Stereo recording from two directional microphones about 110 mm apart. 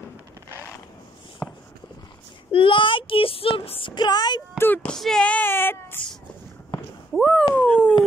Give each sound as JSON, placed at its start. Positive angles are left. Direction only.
{"t": 1.4, "sound": "walk", "side_deg": 0}
{"t": 2.5, "sound": "child singing", "side_deg": 50}
{"t": 4.6, "sound": "speech", "side_deg": 20}
{"t": 4.9, "sound": "speech", "side_deg": 5}
{"t": 7.2, "sound": "speech", "side_deg": 5}